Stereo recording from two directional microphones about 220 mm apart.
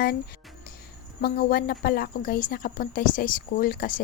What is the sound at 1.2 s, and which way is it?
A woman's voice, 40° left (ahead or behind).